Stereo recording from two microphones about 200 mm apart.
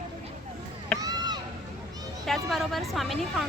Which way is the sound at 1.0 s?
20° right (ahead or behind).